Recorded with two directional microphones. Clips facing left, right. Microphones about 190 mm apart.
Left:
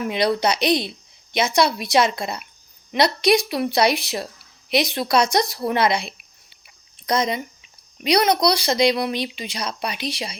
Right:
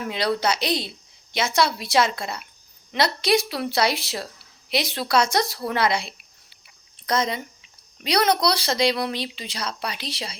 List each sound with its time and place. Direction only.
0.1 s a woman's voice: 20° left (ahead or behind)